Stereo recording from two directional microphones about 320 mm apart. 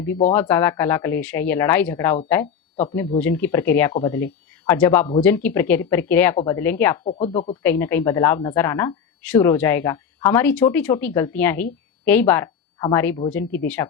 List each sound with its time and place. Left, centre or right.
0.3 s a woman's voice: centre
7.0 s speech: centre
7.6 s a woman's voice: centre